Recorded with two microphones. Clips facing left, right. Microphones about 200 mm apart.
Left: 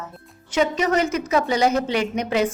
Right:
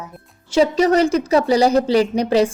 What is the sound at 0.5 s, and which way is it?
A woman's voice, 35° right (ahead or behind).